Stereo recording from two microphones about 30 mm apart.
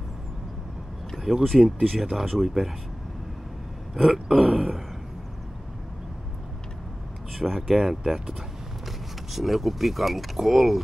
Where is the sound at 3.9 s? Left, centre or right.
Centre.